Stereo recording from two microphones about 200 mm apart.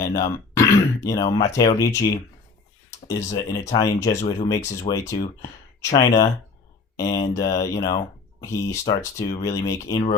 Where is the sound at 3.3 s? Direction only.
20° left (ahead or behind).